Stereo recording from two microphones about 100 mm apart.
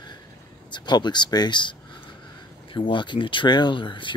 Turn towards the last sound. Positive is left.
turn(degrees=55)  # may be behind; listen again after turning